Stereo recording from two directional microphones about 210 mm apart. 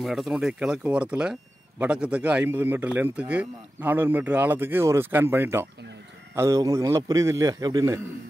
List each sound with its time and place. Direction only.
0.0 s speech: centre (ahead or behind); by 8.0 s 15° right (ahead or behind)